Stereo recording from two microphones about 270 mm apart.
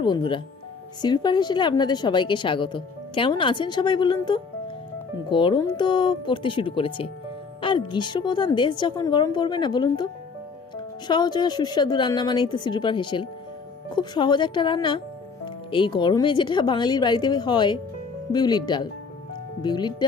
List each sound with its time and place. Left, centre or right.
0.0 s a woman's voice: centre
11.1 s a woman's voice: centre